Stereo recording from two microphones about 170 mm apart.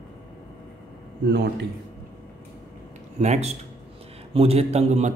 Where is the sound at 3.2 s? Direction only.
40° right (ahead or behind).